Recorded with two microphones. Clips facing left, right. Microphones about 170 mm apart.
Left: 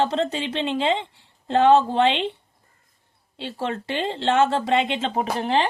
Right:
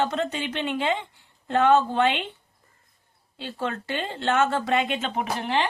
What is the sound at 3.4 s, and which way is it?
Speech, 25° left (ahead or behind).